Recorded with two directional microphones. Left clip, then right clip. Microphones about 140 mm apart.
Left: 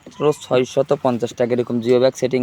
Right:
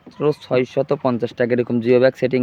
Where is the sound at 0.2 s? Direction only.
15° right (ahead or behind).